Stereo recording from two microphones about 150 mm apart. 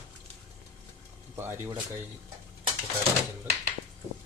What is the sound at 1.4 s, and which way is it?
Speech, 15° right (ahead or behind).